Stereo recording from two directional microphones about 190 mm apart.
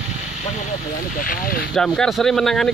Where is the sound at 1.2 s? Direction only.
45° left (ahead or behind).